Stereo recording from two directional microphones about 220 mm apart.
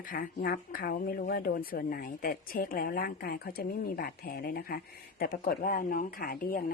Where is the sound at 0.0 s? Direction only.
40° left (ahead or behind).